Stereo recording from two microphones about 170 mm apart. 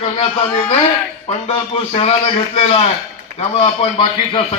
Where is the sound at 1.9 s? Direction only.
35° left (ahead or behind).